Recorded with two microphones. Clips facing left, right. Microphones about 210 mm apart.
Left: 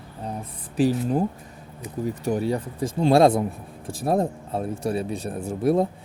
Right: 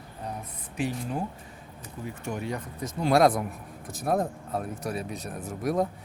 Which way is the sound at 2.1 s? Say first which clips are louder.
Left 9 dB; 35° left (ahead or behind).